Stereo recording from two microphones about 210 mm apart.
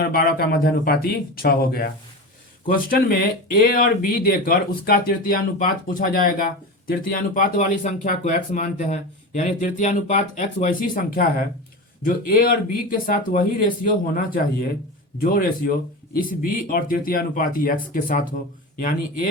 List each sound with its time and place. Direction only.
0.1 s speech: 45° left (ahead or behind)
15.2 s speech: 45° left (ahead or behind)